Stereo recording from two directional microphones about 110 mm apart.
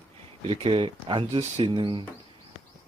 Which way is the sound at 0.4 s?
55° right (ahead or behind).